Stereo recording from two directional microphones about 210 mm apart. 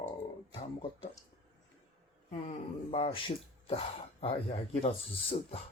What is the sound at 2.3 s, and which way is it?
Speech, 30° left (ahead or behind).